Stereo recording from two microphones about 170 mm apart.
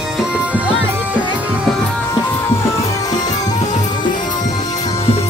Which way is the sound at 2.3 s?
15° left (ahead or behind).